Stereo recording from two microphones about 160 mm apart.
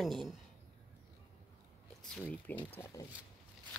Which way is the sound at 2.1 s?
10° left (ahead or behind).